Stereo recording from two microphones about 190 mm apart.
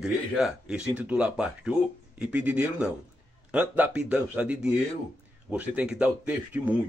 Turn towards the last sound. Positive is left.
turn(degrees=-5)  # may be behind; listen again after turning